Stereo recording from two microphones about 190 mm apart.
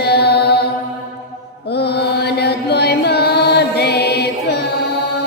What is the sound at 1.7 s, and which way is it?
Music, 60° left (ahead or behind).